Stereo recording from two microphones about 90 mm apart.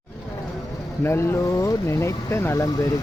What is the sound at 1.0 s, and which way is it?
Speech, 25° left (ahead or behind).